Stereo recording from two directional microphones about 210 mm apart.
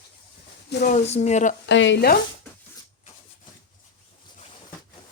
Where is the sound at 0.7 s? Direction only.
50° left (ahead or behind).